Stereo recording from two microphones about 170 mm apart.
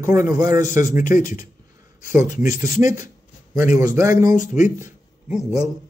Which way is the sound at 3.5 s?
15° right (ahead or behind).